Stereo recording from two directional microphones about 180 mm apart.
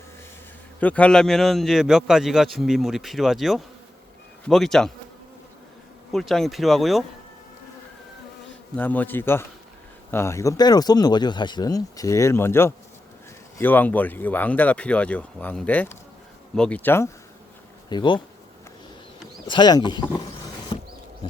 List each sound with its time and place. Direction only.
0.8 s a man's voice: 10° left (ahead or behind)
6.1 s a man's voice: centre (ahead or behind)
8.7 s speech: 10° left (ahead or behind)
17.8 s speech: 25° left (ahead or behind)
19.5 s speech: 25° left (ahead or behind)
20.7 s a sound: 30° left (ahead or behind)